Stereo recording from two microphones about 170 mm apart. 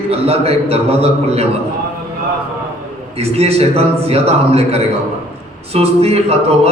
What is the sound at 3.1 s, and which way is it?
A man's voice, 35° right (ahead or behind).